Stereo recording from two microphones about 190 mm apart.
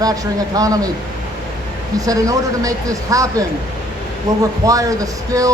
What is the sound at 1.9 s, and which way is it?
Speech, 20° right (ahead or behind).